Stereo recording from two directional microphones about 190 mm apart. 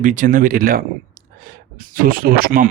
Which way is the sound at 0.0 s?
45° right (ahead or behind).